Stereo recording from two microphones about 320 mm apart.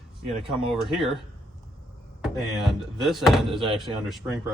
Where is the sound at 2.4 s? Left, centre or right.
Centre.